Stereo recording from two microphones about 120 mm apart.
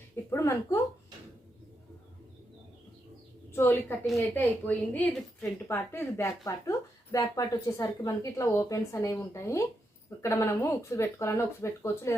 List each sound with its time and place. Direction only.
0.3 s speech: 20° left (ahead or behind)
3.5 s a woman's voice: 20° left (ahead or behind)